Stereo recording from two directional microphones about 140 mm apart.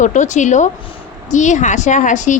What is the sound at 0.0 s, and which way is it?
A woman's voice, 60° left (ahead or behind).